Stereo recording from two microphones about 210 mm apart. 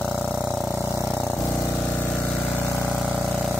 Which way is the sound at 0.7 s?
15° left (ahead or behind).